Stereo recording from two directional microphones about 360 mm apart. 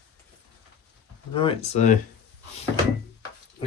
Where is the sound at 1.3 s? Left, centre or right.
Centre.